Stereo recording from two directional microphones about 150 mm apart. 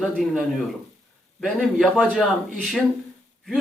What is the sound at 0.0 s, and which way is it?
A man's voice, centre (ahead or behind).